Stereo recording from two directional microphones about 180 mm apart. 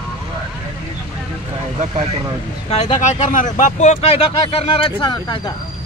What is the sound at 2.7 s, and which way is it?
Speech, 40° left (ahead or behind).